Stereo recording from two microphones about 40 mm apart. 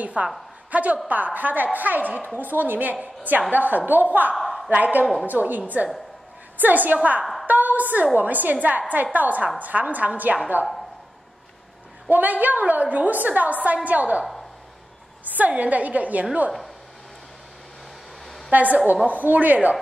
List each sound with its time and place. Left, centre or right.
0.0 s a woman's voice: right
4.4 s a sound: centre
4.6 s a woman's voice: right
6.6 s a woman's voice: right
12.1 s a woman's voice: right
15.2 s a woman's voice: right
18.5 s a woman's voice: right